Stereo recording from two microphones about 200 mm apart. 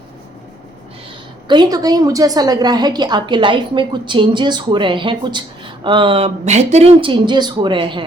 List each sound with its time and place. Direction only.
1.5 s a woman's voice: 20° right (ahead or behind)